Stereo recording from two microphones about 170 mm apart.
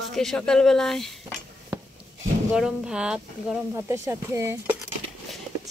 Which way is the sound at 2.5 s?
5° right (ahead or behind).